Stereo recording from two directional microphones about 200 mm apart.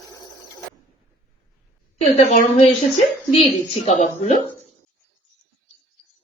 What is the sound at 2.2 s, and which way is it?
A woman's voice, 35° left (ahead or behind).